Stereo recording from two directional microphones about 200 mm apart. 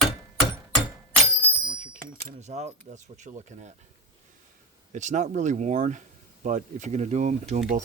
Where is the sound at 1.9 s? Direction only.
35° right (ahead or behind).